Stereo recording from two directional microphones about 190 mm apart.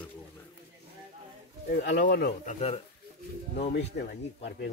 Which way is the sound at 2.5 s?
30° left (ahead or behind).